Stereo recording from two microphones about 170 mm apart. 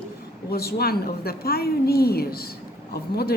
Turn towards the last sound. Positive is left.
turn(degrees=65)  # may be behind; listen again after turning